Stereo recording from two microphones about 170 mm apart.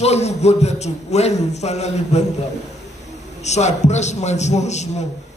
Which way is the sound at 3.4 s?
40° left (ahead or behind).